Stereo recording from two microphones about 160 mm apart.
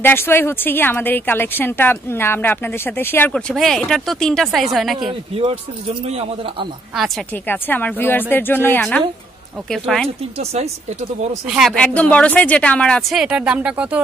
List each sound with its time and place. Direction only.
0.0 s speech: 15° left (ahead or behind)
5.3 s speech: 35° right (ahead or behind)
7.4 s speech: 10° left (ahead or behind)
9.7 s speech: 5° left (ahead or behind)
10.0 s speech: 40° right (ahead or behind)
11.4 s speech: 5° right (ahead or behind)
11.7 s speech: 10° left (ahead or behind); by 14.0 s 10° right (ahead or behind)